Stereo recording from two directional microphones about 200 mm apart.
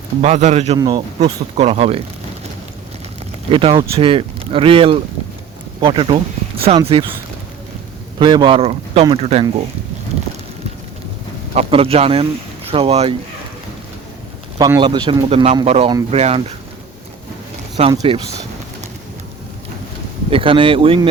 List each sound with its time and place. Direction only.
0.2 s speech: 35° right (ahead or behind)
3.5 s speech: 25° right (ahead or behind)
8.2 s speech: 25° right (ahead or behind)
11.5 s speech: 30° right (ahead or behind)
14.6 s speech: 20° right (ahead or behind)
18.1 s speech: 30° right (ahead or behind)
20.3 s speech: 25° right (ahead or behind)